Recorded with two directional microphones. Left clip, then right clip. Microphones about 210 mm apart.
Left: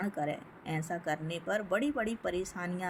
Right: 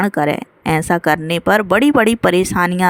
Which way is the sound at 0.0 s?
50° right (ahead or behind).